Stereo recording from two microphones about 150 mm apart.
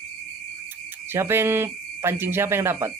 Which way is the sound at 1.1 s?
15° right (ahead or behind).